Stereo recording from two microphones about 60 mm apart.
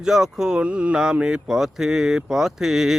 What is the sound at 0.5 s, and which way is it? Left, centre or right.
Mantra, right.